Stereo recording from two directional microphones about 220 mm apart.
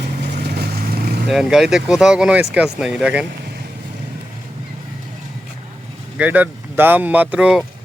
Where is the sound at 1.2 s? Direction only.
Centre (ahead or behind).